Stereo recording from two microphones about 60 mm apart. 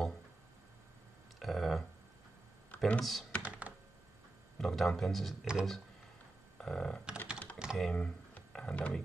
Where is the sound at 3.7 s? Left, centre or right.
Right.